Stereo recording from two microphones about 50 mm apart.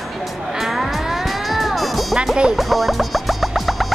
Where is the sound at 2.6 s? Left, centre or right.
Centre.